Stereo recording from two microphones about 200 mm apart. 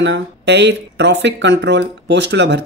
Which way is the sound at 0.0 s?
60° right (ahead or behind).